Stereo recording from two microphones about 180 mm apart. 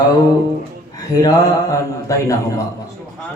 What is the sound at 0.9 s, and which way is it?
A man's voice, 20° left (ahead or behind).